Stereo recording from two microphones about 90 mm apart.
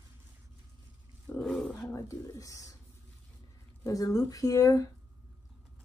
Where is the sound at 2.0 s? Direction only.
40° left (ahead or behind).